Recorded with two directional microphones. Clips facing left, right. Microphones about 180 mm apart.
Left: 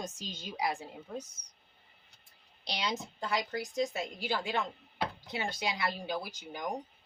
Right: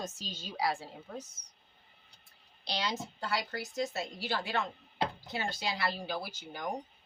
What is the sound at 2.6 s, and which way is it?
A woman's voice, 20° left (ahead or behind).